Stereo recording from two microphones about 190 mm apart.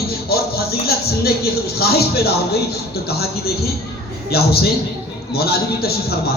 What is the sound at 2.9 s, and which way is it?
A man's voice, 55° left (ahead or behind).